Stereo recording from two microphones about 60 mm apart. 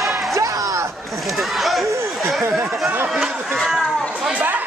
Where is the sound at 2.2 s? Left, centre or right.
Centre.